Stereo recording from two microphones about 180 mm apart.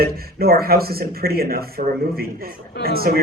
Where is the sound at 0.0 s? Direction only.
55° right (ahead or behind).